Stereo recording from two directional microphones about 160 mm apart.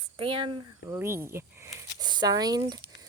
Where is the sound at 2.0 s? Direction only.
25° right (ahead or behind).